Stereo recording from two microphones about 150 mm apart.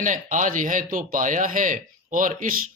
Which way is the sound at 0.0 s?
60° right (ahead or behind).